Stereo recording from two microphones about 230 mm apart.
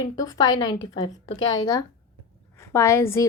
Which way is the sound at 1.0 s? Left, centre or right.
Left.